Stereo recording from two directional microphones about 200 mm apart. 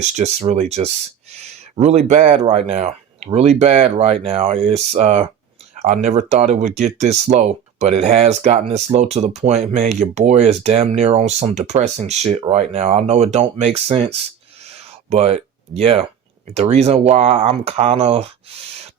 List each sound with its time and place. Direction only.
0.0 s speech: 35° right (ahead or behind)
14.7 s a sound: 30° right (ahead or behind)
16.6 s speech: 30° right (ahead or behind)